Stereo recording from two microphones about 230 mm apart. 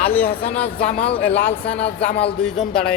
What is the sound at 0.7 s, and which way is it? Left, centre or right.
Speech, left.